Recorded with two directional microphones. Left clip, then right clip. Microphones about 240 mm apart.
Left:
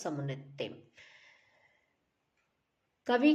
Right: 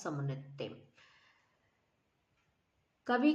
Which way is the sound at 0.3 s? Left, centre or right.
Centre.